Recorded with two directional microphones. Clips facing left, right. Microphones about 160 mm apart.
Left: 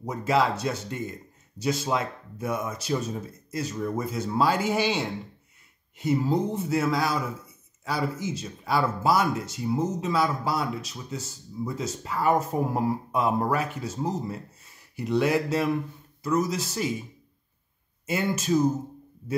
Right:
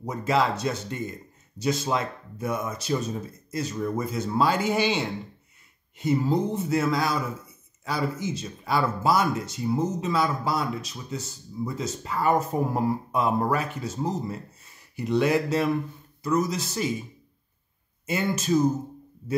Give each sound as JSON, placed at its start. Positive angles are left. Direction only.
{"t": 0.0, "sound": "speech", "side_deg": 5}
{"t": 18.0, "sound": "speech", "side_deg": 5}